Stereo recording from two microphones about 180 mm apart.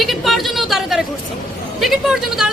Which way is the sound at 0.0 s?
Centre (ahead or behind).